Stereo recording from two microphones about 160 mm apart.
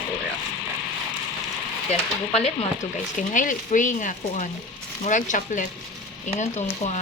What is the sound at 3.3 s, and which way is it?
Speech, 55° left (ahead or behind).